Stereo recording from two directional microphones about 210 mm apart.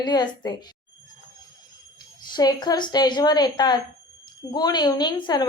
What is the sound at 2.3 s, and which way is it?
A woman's voice, 20° left (ahead or behind).